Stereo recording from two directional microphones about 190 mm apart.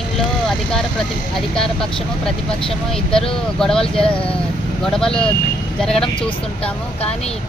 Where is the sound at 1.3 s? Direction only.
5° left (ahead or behind).